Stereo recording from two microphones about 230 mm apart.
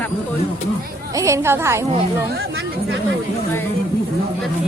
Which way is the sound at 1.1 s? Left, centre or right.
Centre.